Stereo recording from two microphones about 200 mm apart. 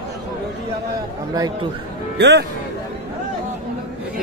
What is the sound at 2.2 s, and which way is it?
Speech, 55° right (ahead or behind).